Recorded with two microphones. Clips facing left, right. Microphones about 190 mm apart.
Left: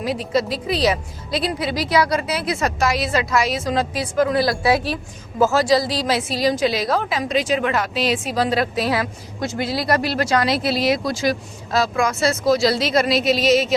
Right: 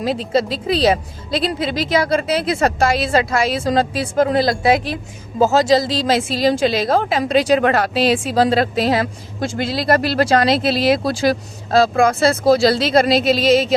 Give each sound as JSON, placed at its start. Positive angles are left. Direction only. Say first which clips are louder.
{"t": 0.0, "sound": "speech", "louder": "right 3 dB", "side_deg": -25}